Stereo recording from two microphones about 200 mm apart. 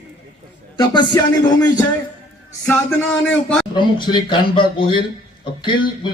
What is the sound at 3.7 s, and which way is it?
Music, 25° left (ahead or behind).